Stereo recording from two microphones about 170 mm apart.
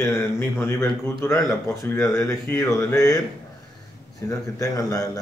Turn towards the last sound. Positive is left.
turn(degrees=20)  # may be behind; listen again after turning